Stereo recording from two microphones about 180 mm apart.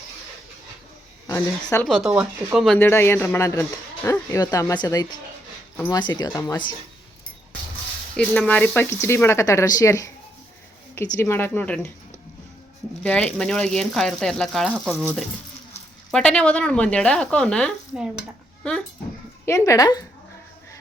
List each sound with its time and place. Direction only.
1.8 s speech: centre (ahead or behind)
2.7 s a man's voice: 10° left (ahead or behind)
8.1 s a man's voice: 5° left (ahead or behind)
11.1 s a man's voice: 15° left (ahead or behind)
13.0 s speech: 5° left (ahead or behind)
16.1 s speech: 5° left (ahead or behind)
19.5 s speech: 15° left (ahead or behind)